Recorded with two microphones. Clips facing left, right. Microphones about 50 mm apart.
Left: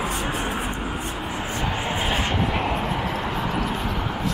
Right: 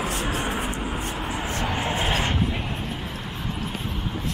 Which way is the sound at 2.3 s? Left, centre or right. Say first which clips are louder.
Left 4 dB; left.